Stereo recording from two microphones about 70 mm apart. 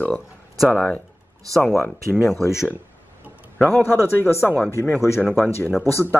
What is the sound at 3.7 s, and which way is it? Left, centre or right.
Speech, left.